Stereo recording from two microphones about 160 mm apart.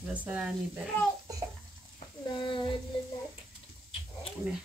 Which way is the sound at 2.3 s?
30° left (ahead or behind).